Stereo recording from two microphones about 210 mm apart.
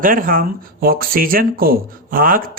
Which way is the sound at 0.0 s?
40° right (ahead or behind).